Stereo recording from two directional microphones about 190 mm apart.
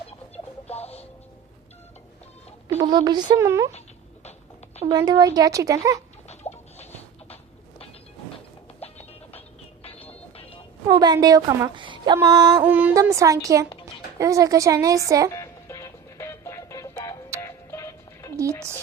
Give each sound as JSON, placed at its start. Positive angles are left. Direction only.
{"t": 0.7, "sound": "music", "side_deg": 30}
{"t": 2.7, "sound": "speech", "side_deg": -20}
{"t": 4.9, "sound": "speech", "side_deg": -20}
{"t": 6.5, "sound": "a sound", "side_deg": 35}
{"t": 8.8, "sound": "music", "side_deg": 30}
{"t": 10.8, "sound": "a woman's voice", "side_deg": -20}
{"t": 15.3, "sound": "music", "side_deg": 15}